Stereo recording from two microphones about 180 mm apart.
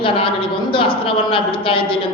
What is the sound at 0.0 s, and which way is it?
A woman's voice, 30° left (ahead or behind).